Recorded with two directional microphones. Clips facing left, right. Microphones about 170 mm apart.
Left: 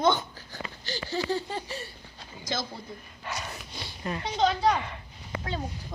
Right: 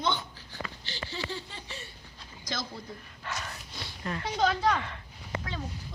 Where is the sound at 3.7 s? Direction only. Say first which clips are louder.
Left 2 dB; 15° left (ahead or behind).